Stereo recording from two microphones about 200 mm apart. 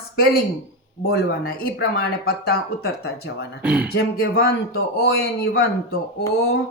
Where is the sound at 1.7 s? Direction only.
55° left (ahead or behind).